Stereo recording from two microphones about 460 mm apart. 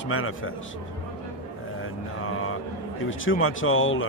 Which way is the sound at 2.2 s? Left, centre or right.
Left.